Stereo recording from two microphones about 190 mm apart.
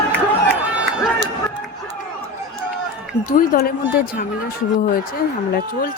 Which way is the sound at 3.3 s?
50° left (ahead or behind).